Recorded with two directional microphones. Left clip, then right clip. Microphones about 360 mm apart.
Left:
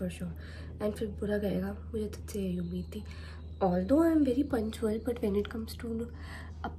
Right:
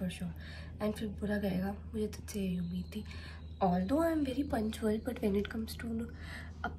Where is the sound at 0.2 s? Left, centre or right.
Right.